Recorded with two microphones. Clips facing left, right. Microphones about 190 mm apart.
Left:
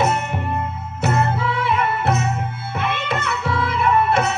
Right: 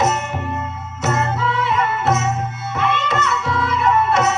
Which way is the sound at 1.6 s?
55° left (ahead or behind).